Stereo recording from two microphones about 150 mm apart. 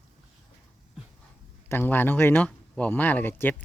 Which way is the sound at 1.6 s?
15° left (ahead or behind).